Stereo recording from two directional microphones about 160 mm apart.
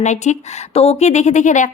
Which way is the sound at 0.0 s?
45° left (ahead or behind).